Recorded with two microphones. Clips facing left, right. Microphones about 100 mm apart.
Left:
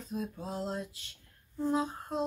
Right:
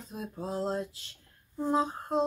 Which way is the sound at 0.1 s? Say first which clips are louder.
Right 1 dB; 30° right (ahead or behind).